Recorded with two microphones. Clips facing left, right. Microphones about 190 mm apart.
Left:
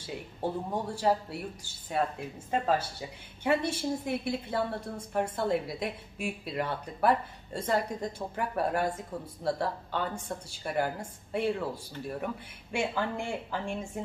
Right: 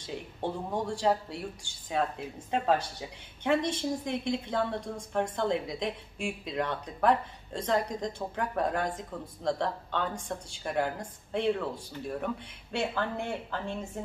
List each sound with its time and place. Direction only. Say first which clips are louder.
0.0 s a woman's voice: even; 5° left (ahead or behind)
12.7 s a woman's voice: even; 10° left (ahead or behind)